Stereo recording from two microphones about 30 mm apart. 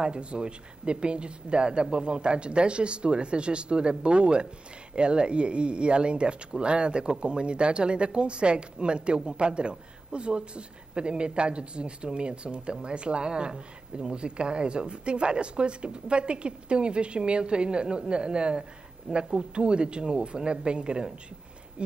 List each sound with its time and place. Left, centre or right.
0.0 s speech: right